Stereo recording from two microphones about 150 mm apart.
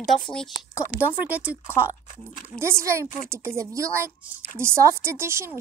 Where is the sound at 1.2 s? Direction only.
10° right (ahead or behind).